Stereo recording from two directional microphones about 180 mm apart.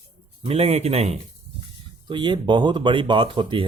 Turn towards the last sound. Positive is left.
turn(degrees=-25)  # may be behind; listen again after turning